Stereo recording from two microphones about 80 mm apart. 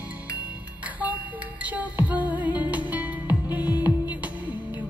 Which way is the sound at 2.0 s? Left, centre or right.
Centre.